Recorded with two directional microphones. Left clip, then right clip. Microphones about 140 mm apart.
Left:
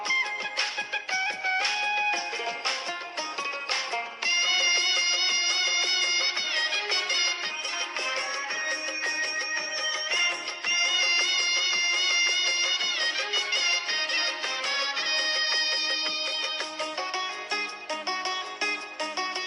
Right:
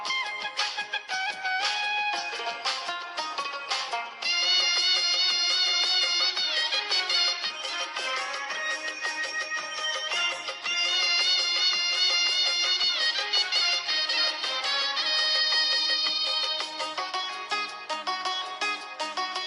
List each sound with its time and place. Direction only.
1.1 s music: 15° left (ahead or behind)
3.9 s music: 15° left (ahead or behind)
4.5 s music: 35° right (ahead or behind)
4.8 s music: 15° left (ahead or behind)
10.7 s music: 15° left (ahead or behind)